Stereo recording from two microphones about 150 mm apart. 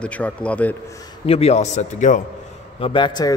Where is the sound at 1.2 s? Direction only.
45° left (ahead or behind).